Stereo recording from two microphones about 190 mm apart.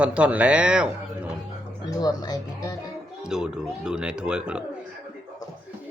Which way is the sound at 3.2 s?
5° right (ahead or behind).